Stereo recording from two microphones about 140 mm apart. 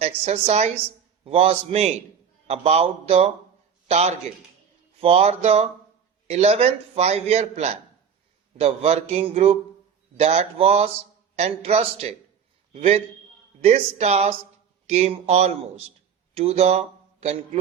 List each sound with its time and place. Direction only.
0.0 s a man's voice: 50° right (ahead or behind)